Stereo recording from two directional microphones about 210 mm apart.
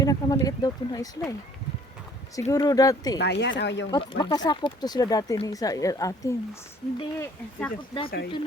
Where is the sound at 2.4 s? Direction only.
15° left (ahead or behind).